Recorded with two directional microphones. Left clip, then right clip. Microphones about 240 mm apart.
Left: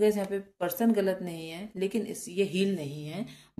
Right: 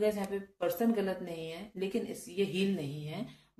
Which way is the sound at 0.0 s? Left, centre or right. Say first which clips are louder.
Left 5 dB; left.